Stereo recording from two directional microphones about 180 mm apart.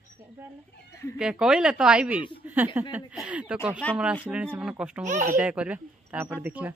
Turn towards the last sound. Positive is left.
turn(degrees=-10)  # may be behind; listen again after turning